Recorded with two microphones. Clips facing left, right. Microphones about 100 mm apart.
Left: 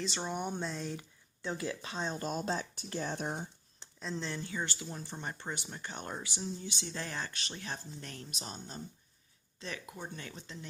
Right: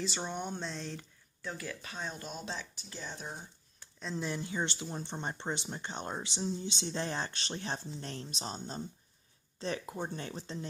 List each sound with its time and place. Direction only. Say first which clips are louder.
0.0 s speech: left 1 dB; centre (ahead or behind)
1.4 s speech: left 4 dB; 20° left (ahead or behind)
2.1 s speech: left 6 dB; 45° left (ahead or behind); by 3.4 s 60° left (ahead or behind)
4.0 s speech: right 1 dB; 5° right (ahead or behind)
4.3 s speech: right 3 dB; 20° right (ahead or behind); by 10.7 s 35° right (ahead or behind)